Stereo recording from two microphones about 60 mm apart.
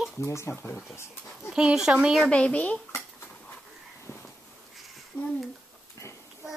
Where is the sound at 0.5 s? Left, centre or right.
Left.